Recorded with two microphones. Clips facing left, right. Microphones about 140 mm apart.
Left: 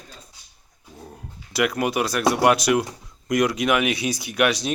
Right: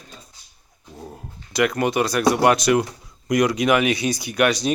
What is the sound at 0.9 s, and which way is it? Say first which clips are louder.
Dog: right 4 dB; 5° right (ahead or behind).